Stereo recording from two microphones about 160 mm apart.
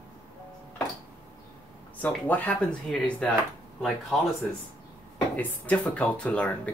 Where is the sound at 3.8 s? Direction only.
Centre (ahead or behind).